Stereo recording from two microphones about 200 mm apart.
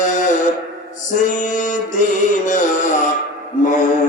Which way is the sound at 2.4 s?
40° left (ahead or behind).